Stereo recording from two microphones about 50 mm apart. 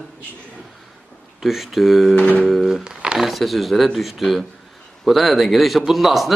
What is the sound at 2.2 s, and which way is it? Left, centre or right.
Music, left.